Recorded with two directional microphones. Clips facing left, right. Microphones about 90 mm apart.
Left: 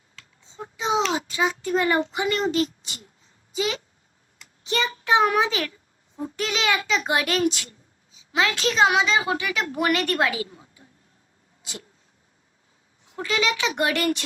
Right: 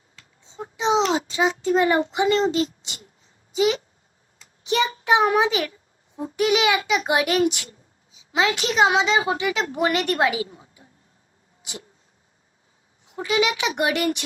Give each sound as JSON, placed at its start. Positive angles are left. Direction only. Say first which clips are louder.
{"t": 0.5, "sound": "child singing", "louder": "right 3 dB", "side_deg": -20}
{"t": 3.5, "sound": "a child's voice", "louder": "right 6 dB", "side_deg": -20}
{"t": 13.1, "sound": "a child's voice", "louder": "right 3 dB", "side_deg": -15}